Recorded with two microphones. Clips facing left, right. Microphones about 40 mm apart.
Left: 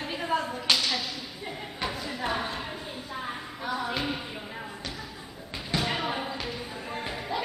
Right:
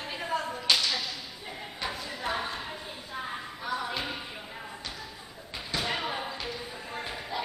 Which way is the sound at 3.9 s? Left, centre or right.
Centre.